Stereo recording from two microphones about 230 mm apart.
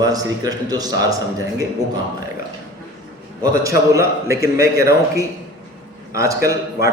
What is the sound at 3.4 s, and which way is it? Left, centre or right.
A man's voice, centre.